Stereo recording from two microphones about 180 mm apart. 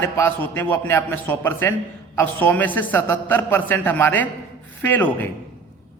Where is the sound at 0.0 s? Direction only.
15° left (ahead or behind).